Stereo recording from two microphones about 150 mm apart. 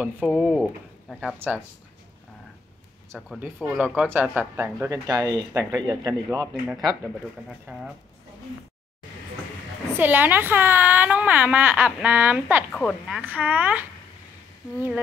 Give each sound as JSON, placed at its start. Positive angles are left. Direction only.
{"t": 0.3, "sound": "a woman's voice", "side_deg": 5}
{"t": 1.4, "sound": "speech", "side_deg": -15}
{"t": 3.1, "sound": "speech", "side_deg": -5}
{"t": 5.0, "sound": "speech", "side_deg": -25}
{"t": 6.7, "sound": "a woman's voice", "side_deg": 0}
{"t": 9.9, "sound": "speech", "side_deg": -10}
{"t": 12.7, "sound": "a woman's voice", "side_deg": 0}
{"t": 13.2, "sound": "speech", "side_deg": -10}